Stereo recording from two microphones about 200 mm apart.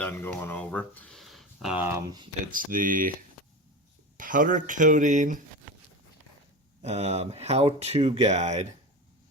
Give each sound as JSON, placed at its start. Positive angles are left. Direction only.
{"t": 0.0, "sound": "speech", "side_deg": 10}
{"t": 2.6, "sound": "speech", "side_deg": -40}
{"t": 4.2, "sound": "speech", "side_deg": -40}
{"t": 6.8, "sound": "speech", "side_deg": -35}